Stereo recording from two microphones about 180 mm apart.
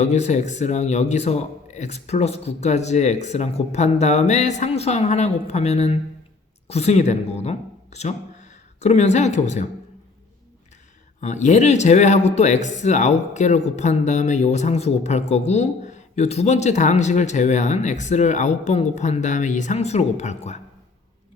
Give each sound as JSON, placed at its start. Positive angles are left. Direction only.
{"t": 0.0, "sound": "speech", "side_deg": 40}
{"t": 11.2, "sound": "speech", "side_deg": 40}